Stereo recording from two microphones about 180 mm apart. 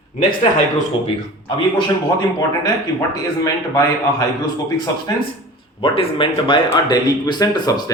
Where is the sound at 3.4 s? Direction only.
20° left (ahead or behind).